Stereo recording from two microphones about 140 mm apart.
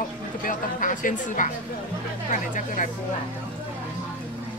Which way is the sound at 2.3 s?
65° left (ahead or behind).